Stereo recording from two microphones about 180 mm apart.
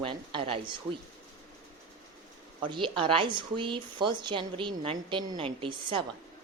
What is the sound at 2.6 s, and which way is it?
Speech, 25° right (ahead or behind).